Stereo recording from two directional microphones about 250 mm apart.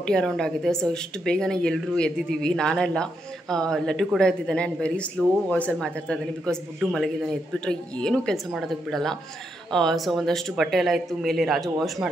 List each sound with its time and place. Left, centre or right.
0.0 s speech: centre